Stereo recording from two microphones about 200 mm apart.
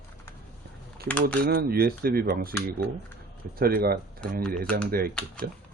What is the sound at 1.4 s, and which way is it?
Speech, 50° right (ahead or behind).